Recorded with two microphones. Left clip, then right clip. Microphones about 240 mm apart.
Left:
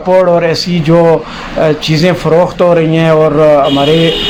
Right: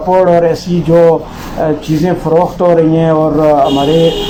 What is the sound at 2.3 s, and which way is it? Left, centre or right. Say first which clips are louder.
A man's voice: left 1 dB; left.